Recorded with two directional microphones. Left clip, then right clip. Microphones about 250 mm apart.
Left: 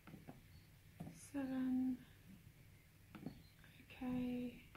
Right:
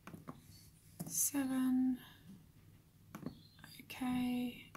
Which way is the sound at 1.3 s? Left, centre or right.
Right.